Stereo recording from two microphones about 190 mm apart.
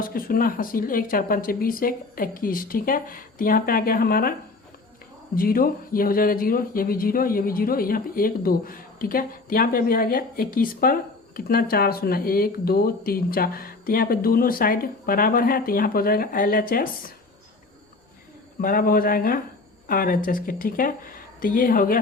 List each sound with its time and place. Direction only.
0.0 s speech: 50° left (ahead or behind)
18.6 s speech: 50° left (ahead or behind)